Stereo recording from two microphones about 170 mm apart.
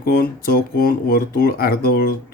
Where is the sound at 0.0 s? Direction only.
60° left (ahead or behind).